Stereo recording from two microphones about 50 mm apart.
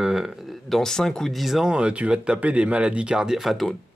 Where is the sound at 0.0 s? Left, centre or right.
Centre.